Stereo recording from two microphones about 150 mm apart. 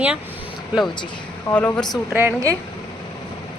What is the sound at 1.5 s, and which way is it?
Speech, 10° left (ahead or behind).